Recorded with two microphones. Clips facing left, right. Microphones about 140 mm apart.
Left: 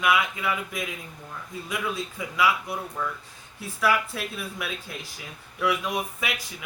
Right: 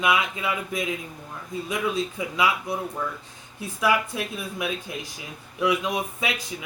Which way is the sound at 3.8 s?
15° right (ahead or behind).